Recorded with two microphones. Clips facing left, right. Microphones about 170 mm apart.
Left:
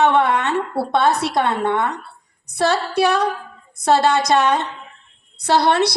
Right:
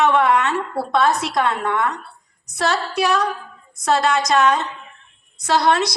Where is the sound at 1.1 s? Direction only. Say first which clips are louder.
Left 2 dB; 60° left (ahead or behind).